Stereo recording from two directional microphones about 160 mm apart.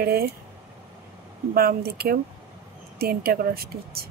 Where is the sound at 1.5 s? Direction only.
70° right (ahead or behind).